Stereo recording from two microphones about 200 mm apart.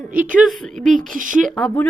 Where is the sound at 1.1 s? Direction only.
40° right (ahead or behind).